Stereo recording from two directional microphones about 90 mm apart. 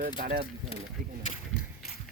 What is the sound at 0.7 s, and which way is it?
Speech, 90° left.